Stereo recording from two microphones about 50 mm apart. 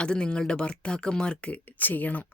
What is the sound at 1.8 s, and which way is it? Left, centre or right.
Speech, left.